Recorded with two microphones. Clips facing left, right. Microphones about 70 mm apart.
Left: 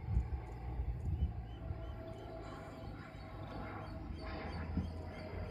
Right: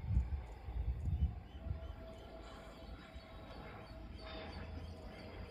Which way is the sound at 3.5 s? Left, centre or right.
Left.